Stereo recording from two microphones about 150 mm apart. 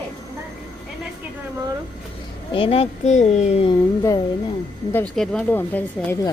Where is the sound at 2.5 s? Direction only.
35° left (ahead or behind).